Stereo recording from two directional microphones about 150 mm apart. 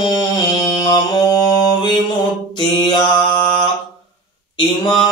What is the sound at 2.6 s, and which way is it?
Mantra, 30° left (ahead or behind).